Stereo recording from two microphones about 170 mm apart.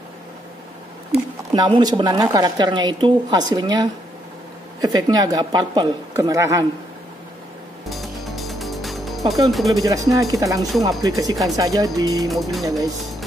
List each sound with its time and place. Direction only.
1.5 s a woman's voice: 25° right (ahead or behind)
7.9 s music: centre (ahead or behind)
9.5 s speech: centre (ahead or behind)
9.8 s a woman's voice: 20° right (ahead or behind)
12.3 s speech: centre (ahead or behind)